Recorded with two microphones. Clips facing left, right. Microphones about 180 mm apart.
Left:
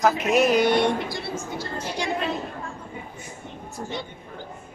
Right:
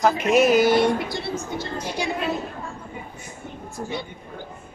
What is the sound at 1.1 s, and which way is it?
Speech, 20° right (ahead or behind).